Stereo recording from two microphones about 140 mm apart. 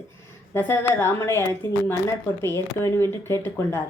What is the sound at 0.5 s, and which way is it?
A woman's voice, 15° left (ahead or behind).